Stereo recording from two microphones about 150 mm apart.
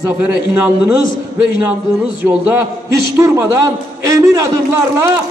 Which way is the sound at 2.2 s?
15° right (ahead or behind).